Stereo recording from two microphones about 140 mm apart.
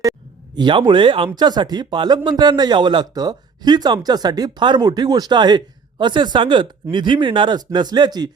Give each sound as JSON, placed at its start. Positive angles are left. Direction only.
{"t": 0.5, "sound": "a man's voice", "side_deg": -35}